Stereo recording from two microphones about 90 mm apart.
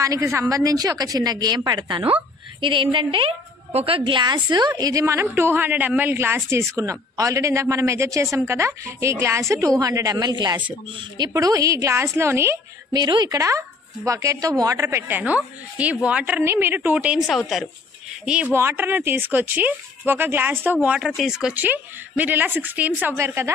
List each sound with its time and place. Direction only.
0.0 s a woman's voice: 35° right (ahead or behind)
0.7 s a woman's voice: 45° right (ahead or behind)
5.2 s a woman's voice: 25° right (ahead or behind); by 10.1 s 40° right (ahead or behind)
10.1 s a woman's voice: 55° right (ahead or behind); by 12.5 s 30° right (ahead or behind)
12.9 s a woman's voice: 55° right (ahead or behind)
13.4 s a woman's voice: 35° right (ahead or behind); by 17.2 s 15° right (ahead or behind)
17.2 s a woman's voice: centre (ahead or behind)
18.5 s speech: 25° right (ahead or behind); by 21.5 s 5° right (ahead or behind)
21.5 s speech: 20° right (ahead or behind)
23.1 s a woman's voice: 30° right (ahead or behind)